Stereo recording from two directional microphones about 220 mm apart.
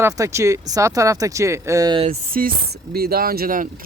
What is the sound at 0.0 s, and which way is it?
Speech, 15° right (ahead or behind).